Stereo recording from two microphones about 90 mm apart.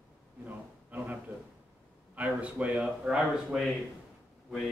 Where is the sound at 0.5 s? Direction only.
20° right (ahead or behind).